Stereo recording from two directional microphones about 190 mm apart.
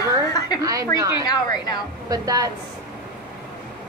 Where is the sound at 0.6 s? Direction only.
15° right (ahead or behind).